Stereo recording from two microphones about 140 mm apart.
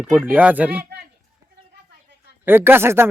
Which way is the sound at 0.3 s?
10° right (ahead or behind).